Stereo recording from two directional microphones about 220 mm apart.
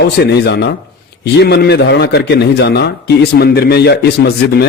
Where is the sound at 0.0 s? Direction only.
50° left (ahead or behind).